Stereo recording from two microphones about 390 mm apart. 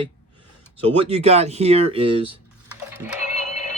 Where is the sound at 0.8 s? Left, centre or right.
Centre.